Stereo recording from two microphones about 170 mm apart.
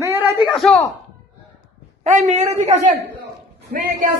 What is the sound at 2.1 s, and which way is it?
Speech, 45° right (ahead or behind).